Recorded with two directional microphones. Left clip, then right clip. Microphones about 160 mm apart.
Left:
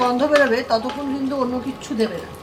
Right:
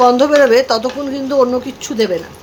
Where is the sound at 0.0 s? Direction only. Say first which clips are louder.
Right 7 dB; 90° right.